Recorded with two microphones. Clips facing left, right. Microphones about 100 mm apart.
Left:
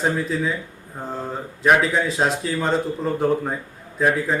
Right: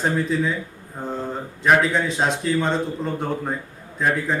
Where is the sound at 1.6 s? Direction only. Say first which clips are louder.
Even; centre (ahead or behind).